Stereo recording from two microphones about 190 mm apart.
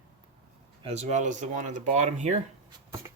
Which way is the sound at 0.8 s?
35° right (ahead or behind).